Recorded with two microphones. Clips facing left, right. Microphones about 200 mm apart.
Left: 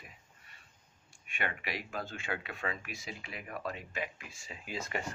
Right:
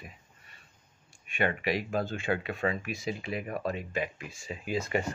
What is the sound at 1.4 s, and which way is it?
Speech, 30° right (ahead or behind).